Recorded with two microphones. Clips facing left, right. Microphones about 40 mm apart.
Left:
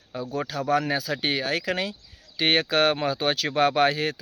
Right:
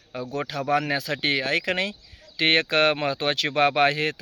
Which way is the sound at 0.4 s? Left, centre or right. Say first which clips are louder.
Even; right.